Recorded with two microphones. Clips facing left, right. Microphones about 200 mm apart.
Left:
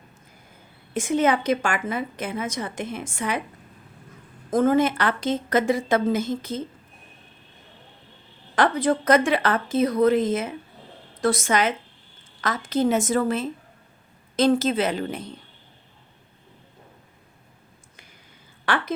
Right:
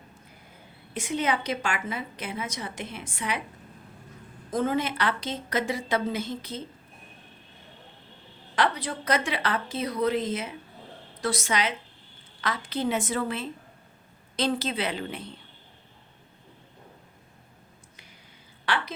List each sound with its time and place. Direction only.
0.9 s a woman's voice: 50° left (ahead or behind)
4.5 s a woman's voice: 50° left (ahead or behind)
8.5 s a woman's voice: 50° left (ahead or behind)
18.6 s a sound: 50° left (ahead or behind)